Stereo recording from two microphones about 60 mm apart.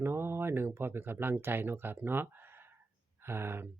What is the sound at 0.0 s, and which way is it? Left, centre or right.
Speech, right.